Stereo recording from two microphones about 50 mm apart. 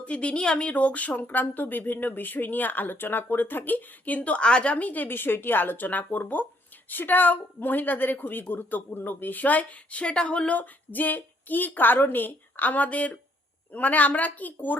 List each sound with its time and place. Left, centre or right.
0.0 s speech: left